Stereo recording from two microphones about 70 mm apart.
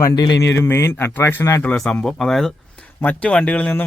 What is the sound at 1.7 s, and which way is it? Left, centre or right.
Speech, centre.